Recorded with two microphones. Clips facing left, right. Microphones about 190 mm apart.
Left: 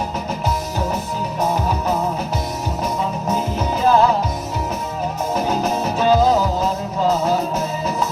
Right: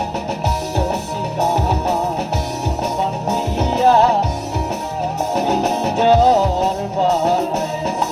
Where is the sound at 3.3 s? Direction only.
70° right (ahead or behind).